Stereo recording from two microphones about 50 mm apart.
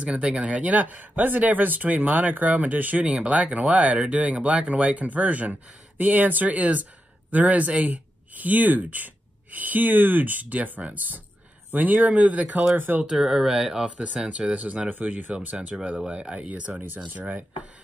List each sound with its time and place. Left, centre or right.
0.0 s speech: right
12.7 s speech: right
13.1 s speech: centre
14.5 s speech: right
15.7 s speech: centre
16.1 s speech: right